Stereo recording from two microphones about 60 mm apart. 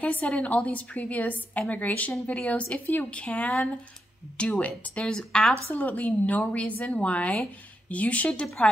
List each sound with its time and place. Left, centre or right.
0.0 s speech: left
5.7 s speech: left